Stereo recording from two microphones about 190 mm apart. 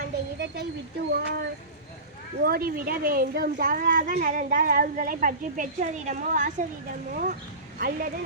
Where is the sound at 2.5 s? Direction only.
50° right (ahead or behind).